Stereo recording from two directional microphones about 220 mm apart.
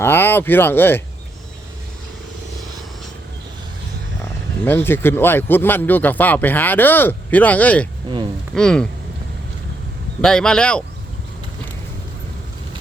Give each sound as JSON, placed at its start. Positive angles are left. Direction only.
{"t": 0.0, "sound": "speech", "side_deg": 10}
{"t": 4.6, "sound": "speech", "side_deg": 10}
{"t": 10.2, "sound": "speech", "side_deg": 5}